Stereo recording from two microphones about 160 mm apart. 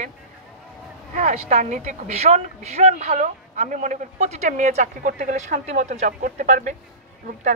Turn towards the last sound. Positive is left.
turn(degrees=-50)  # may be behind; listen again after turning